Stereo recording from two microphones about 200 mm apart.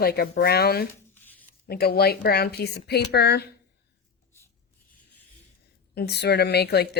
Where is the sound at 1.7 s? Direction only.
50° left (ahead or behind).